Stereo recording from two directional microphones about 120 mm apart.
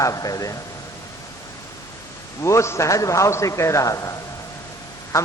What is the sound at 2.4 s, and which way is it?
A man's voice, 25° left (ahead or behind).